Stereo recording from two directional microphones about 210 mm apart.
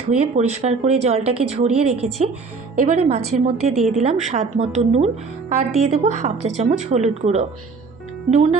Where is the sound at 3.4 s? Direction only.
30° right (ahead or behind).